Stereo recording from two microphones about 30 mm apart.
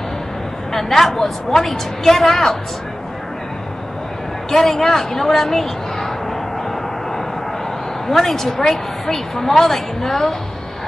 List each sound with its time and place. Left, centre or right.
0.7 s a woman's voice: centre
4.5 s speech: centre
8.3 s a woman's voice: centre